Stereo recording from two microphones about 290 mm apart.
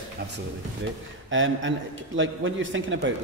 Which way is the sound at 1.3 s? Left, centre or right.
Right.